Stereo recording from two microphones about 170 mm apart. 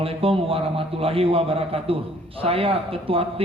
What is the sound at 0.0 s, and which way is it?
A man's voice, 35° right (ahead or behind).